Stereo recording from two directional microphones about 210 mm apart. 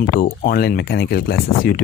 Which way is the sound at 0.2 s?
45° left (ahead or behind).